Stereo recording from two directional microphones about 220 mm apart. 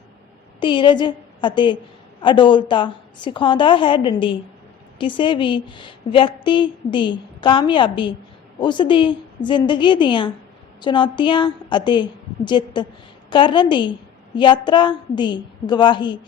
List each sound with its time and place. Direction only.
0.6 s a woman's voice: 20° left (ahead or behind)